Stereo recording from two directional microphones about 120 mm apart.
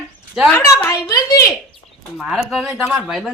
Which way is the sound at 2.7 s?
10° right (ahead or behind).